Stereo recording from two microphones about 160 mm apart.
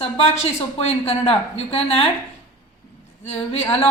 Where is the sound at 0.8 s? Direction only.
35° left (ahead or behind).